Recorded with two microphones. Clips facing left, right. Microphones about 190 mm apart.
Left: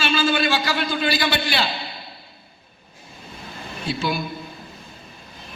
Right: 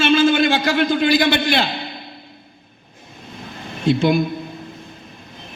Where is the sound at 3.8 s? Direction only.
55° right (ahead or behind).